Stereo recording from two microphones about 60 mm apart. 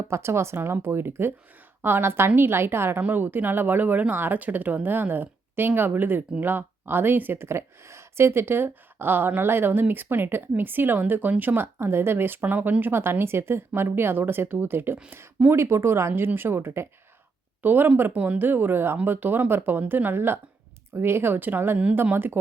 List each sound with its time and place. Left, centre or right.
0.1 s speech: right
18.1 s speech: right